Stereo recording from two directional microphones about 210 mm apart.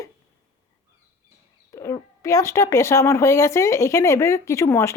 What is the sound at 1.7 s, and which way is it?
Speech, 15° left (ahead or behind).